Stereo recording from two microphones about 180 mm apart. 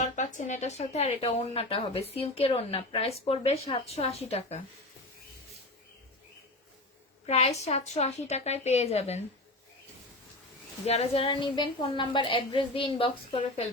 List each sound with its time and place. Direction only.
0.0 s speech: 45° left (ahead or behind)
7.3 s speech: 35° left (ahead or behind)
10.8 s a woman's voice: 35° left (ahead or behind)